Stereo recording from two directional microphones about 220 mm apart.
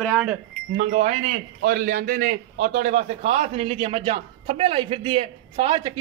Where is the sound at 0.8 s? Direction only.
30° right (ahead or behind).